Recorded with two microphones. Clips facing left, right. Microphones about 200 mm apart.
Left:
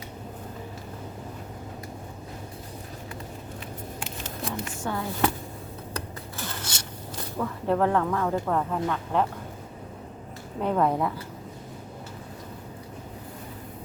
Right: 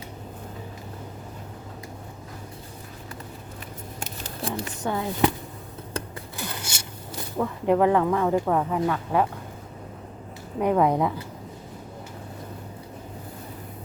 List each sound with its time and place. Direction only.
4.0 s a sound: 35° right (ahead or behind)
4.9 s speech: 20° right (ahead or behind)
5.9 s rub: 15° right (ahead or behind)
7.3 s speech: 15° right (ahead or behind)
10.6 s speech: 15° right (ahead or behind)